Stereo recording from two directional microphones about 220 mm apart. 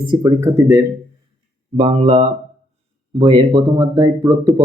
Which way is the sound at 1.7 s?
25° right (ahead or behind).